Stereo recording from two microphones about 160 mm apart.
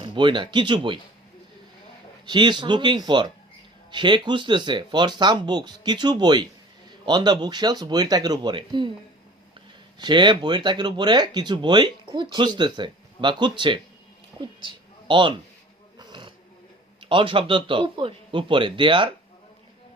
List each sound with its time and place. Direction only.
0.0 s speech: 30° right (ahead or behind)
2.2 s speech: 30° right (ahead or behind)
14.6 s a sound: 30° right (ahead or behind)
17.0 s speech: 30° right (ahead or behind)